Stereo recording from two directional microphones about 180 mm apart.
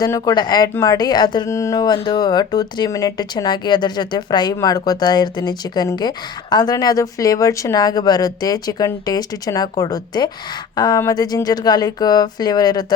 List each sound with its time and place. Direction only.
0.0 s speech: 20° left (ahead or behind)